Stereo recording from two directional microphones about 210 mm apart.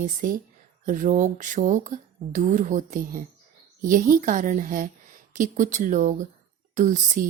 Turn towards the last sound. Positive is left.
turn(degrees=-40)  # may be behind; listen again after turning